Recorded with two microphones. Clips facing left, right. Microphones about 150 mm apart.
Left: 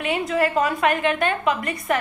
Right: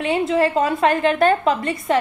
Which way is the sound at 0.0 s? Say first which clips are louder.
Right 4 dB; 30° right (ahead or behind).